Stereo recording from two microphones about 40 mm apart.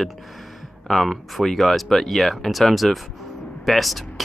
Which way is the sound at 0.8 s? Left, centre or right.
Centre.